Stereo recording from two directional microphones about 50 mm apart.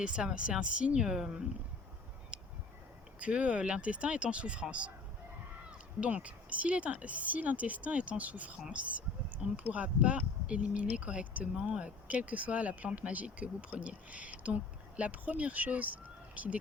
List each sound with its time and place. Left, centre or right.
0.0 s speech: centre
2.3 s a sound: right
3.2 s speech: right
6.0 s speech: right